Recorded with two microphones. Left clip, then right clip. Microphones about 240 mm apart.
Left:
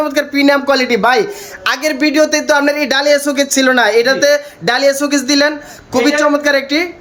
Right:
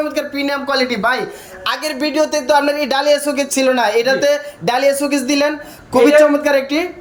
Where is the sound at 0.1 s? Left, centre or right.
Centre.